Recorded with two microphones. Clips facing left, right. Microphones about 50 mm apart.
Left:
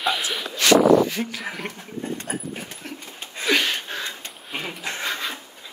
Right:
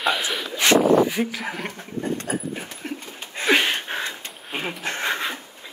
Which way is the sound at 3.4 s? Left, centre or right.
Right.